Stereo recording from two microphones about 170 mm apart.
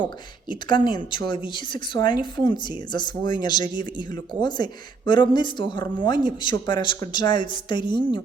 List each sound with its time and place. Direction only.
0.4 s speech: 25° left (ahead or behind)